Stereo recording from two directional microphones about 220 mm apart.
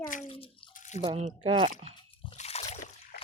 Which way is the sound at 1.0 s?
25° right (ahead or behind).